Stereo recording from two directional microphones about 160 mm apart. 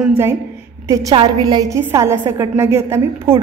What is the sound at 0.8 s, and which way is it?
A woman's voice, 20° right (ahead or behind).